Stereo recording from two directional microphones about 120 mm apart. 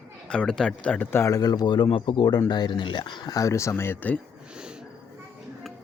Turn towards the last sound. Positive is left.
turn(degrees=15)  # may be behind; listen again after turning